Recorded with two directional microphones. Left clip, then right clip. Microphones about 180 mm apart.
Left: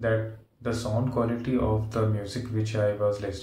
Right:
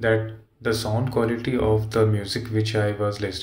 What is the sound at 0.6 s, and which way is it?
Speech, 15° right (ahead or behind).